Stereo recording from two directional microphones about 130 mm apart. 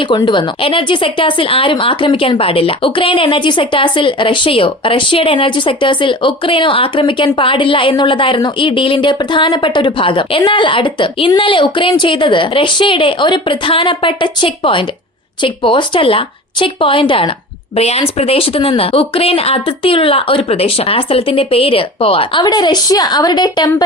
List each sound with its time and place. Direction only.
0.3 s speech: 40° left (ahead or behind)
17.7 s speech: 55° left (ahead or behind); by 23.7 s 30° left (ahead or behind)